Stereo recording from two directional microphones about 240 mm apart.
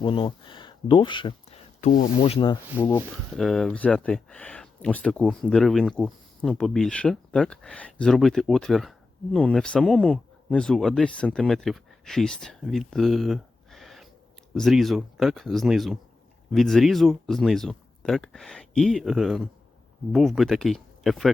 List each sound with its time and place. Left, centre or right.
0.0 s speech: left
2.7 s speech: centre